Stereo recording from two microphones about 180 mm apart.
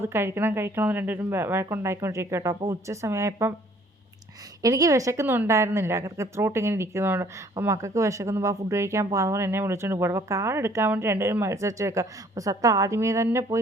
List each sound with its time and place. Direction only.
0.0 s a woman's voice: 15° right (ahead or behind)
4.6 s a woman's voice: 20° right (ahead or behind)